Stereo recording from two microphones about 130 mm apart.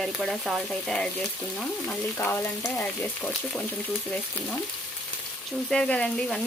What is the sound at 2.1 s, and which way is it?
Speech, 15° left (ahead or behind).